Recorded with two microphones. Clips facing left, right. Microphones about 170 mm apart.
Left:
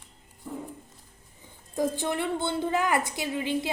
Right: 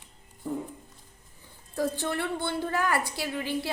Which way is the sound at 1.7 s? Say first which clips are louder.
Left 2 dB; 20° left (ahead or behind).